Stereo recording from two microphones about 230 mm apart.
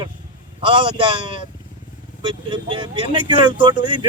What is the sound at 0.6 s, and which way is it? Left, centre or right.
A man's voice, right.